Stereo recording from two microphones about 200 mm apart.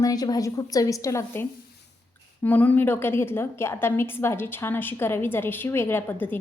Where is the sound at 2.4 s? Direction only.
10° left (ahead or behind).